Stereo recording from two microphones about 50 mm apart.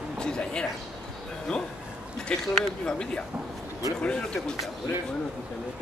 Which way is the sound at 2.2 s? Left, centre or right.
Centre.